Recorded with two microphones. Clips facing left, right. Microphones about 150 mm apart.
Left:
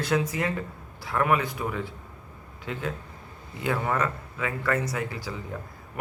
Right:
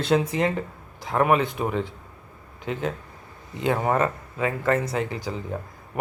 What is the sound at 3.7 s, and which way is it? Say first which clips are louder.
Speech: right 4 dB; 40° right (ahead or behind).